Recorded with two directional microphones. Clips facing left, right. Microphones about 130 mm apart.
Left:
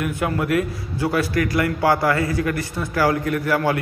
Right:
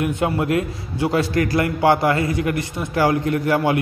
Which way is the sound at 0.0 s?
25° right (ahead or behind).